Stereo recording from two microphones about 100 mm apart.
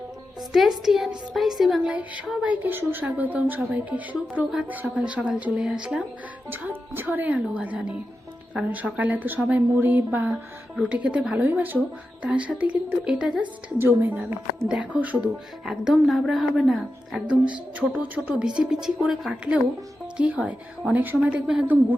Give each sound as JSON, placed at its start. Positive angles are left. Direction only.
{"t": 0.5, "sound": "speech", "side_deg": -5}
{"t": 1.9, "sound": "a woman's voice", "side_deg": -15}
{"t": 2.6, "sound": "a woman's voice", "side_deg": -20}
{"t": 13.7, "sound": "a woman's voice", "side_deg": -20}
{"t": 17.2, "sound": "a woman's voice", "side_deg": -10}